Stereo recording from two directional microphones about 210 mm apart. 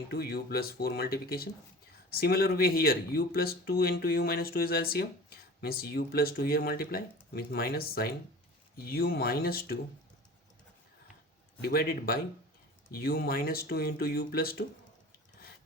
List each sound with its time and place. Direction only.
0.1 s speech: 45° left (ahead or behind)
11.6 s speech: 45° left (ahead or behind)